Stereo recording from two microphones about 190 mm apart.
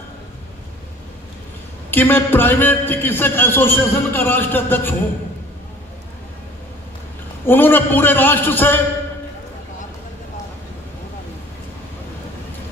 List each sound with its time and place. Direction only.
1.9 s a man's voice: 10° left (ahead or behind)
7.4 s a man's voice: 10° left (ahead or behind)